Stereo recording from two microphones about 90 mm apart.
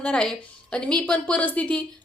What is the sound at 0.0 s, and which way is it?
A woman's voice, 10° left (ahead or behind).